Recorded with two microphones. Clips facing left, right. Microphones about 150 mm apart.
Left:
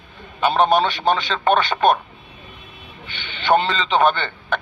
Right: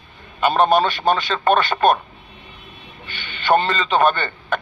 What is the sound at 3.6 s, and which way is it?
Speech, 5° right (ahead or behind).